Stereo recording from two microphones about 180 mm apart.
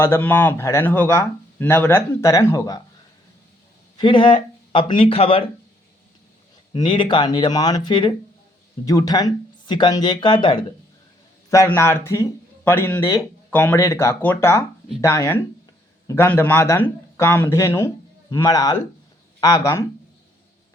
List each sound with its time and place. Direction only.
0.0 s speech: 10° left (ahead or behind)
3.9 s speech: 25° left (ahead or behind)
6.7 s speech: 25° left (ahead or behind)
11.5 s speech: 15° left (ahead or behind)